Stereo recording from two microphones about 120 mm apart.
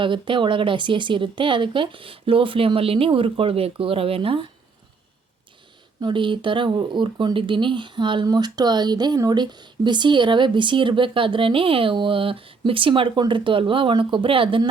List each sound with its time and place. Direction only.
0.0 s speech: 45° right (ahead or behind)
6.0 s speech: 40° right (ahead or behind)